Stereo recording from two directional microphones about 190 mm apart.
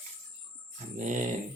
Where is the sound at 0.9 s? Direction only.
40° right (ahead or behind).